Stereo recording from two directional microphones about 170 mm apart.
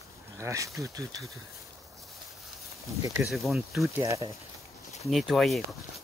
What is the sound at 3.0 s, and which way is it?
Speech, 15° right (ahead or behind).